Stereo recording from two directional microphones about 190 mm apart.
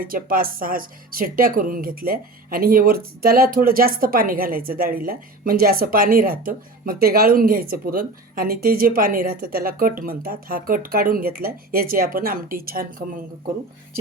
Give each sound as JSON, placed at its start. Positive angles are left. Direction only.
{"t": 0.0, "sound": "speech", "side_deg": -50}